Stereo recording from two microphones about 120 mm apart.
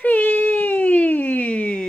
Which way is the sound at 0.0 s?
15° left (ahead or behind).